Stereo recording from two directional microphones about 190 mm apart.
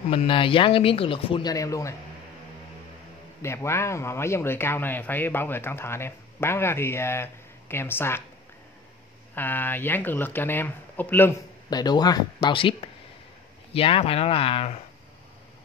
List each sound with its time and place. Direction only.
0.1 s speech: 25° left (ahead or behind)
3.4 s speech: 15° left (ahead or behind)
9.3 s speech: 10° left (ahead or behind); by 14.8 s 30° left (ahead or behind)